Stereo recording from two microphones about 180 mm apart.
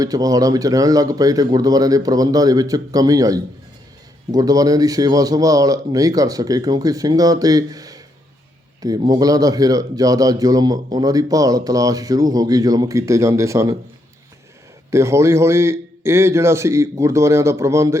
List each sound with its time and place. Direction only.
0.0 s speech: 20° right (ahead or behind)
14.8 s a man's voice: 15° right (ahead or behind)